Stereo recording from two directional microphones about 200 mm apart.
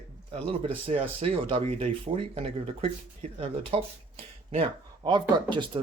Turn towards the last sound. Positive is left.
turn(degrees=-25)  # may be behind; listen again after turning